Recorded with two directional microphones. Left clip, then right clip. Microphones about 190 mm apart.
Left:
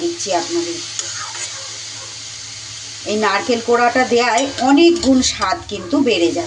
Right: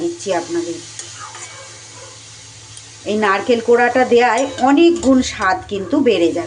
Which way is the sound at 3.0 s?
10° right (ahead or behind).